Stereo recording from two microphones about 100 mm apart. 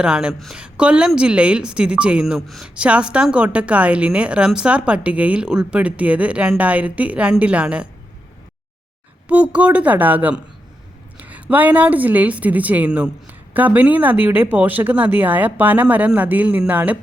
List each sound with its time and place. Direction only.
0.0 s speech: 10° right (ahead or behind)
9.3 s speech: 15° right (ahead or behind)